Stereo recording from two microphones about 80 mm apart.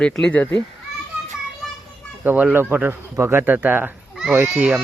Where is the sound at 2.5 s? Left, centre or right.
Right.